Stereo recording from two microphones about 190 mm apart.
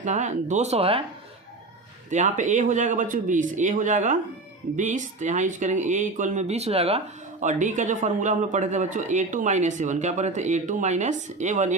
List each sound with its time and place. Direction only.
0.0 s speech: 40° right (ahead or behind)
2.0 s speech: 40° right (ahead or behind)